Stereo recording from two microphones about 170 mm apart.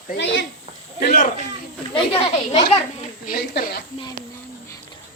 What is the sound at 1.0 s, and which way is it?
Speech, 55° left (ahead or behind).